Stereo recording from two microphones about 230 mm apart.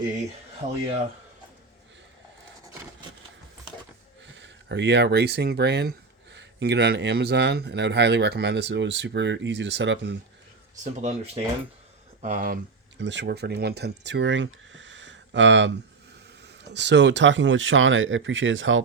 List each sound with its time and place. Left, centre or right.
4.4 s a man's voice: right
11.0 s speech: right
13.0 s speech: right